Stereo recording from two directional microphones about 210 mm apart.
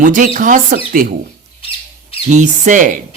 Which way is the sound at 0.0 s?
40° right (ahead or behind).